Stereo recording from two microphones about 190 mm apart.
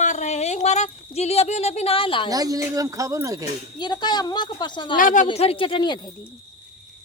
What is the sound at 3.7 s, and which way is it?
A woman's voice, 20° left (ahead or behind).